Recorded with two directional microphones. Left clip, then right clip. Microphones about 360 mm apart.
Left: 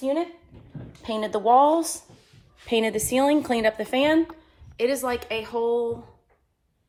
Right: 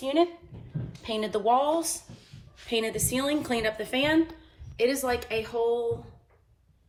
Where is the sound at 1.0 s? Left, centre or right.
Centre.